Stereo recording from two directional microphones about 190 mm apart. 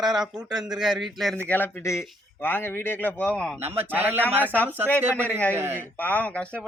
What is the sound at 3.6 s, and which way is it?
Speech, 10° right (ahead or behind).